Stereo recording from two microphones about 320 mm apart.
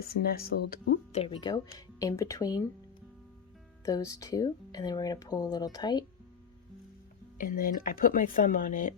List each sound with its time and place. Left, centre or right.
0.0 s speech: left; by 2.6 s centre
3.8 s speech: centre
7.3 s speech: left